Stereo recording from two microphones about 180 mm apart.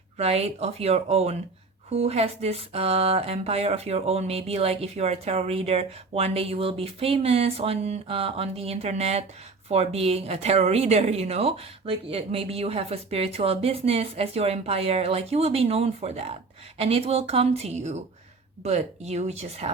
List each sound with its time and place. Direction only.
0.2 s a woman's voice: 35° right (ahead or behind)